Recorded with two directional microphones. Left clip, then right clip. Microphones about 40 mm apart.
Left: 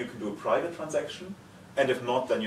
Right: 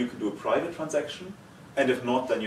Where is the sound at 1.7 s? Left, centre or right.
Centre.